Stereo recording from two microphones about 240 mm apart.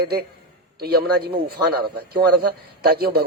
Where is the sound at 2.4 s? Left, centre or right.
Right.